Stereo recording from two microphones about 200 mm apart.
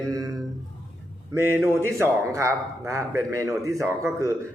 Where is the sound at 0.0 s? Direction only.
15° right (ahead or behind).